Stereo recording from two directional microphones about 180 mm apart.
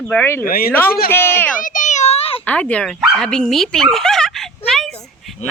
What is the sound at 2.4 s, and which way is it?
Dog, 5° left (ahead or behind).